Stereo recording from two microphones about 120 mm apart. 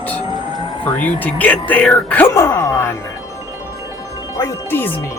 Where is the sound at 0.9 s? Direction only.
15° left (ahead or behind).